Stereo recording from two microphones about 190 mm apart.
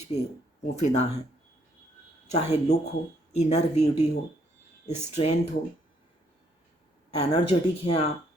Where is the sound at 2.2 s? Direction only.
35° left (ahead or behind).